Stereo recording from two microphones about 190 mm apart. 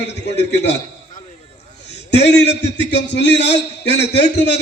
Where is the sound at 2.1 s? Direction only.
60° left (ahead or behind).